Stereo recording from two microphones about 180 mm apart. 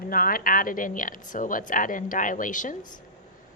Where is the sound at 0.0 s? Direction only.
55° left (ahead or behind).